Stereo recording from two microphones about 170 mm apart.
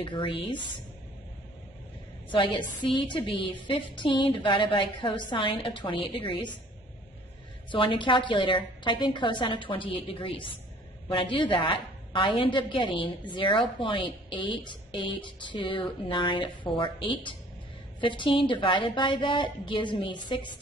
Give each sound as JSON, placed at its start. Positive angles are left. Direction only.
{"t": 0.0, "sound": "a woman's voice", "side_deg": 30}
{"t": 2.8, "sound": "a woman's voice", "side_deg": 30}
{"t": 7.7, "sound": "a woman's voice", "side_deg": 30}